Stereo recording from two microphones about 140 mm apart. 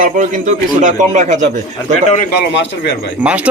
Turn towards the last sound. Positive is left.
turn(degrees=-10)  # may be behind; listen again after turning